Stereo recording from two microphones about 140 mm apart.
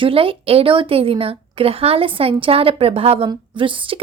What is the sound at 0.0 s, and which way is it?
A woman's voice, 40° right (ahead or behind).